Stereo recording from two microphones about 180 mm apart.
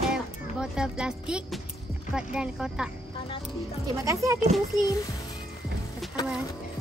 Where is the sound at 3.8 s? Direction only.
20° right (ahead or behind).